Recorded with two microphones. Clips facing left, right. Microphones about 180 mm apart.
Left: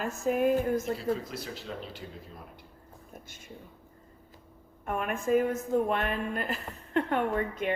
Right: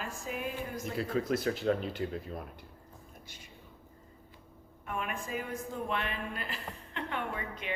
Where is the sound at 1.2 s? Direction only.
55° right (ahead or behind).